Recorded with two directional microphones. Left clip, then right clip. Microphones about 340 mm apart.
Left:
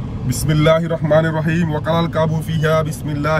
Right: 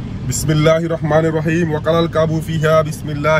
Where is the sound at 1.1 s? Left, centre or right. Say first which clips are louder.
Even; right.